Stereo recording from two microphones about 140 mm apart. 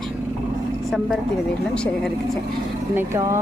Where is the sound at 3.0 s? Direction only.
20° right (ahead or behind).